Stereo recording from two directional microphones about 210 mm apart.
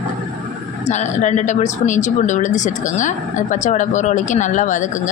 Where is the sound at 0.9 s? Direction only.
35° left (ahead or behind).